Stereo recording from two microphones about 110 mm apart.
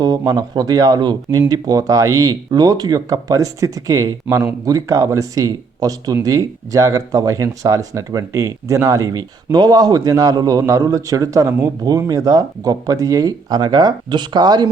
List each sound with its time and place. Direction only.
0.0 s speech: 35° right (ahead or behind)